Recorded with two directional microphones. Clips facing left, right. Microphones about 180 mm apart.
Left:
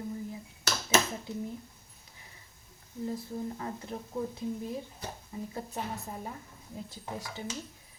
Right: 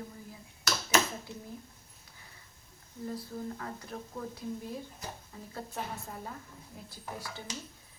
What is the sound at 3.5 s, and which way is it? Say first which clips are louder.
Speech: left 3 dB; 20° left (ahead or behind).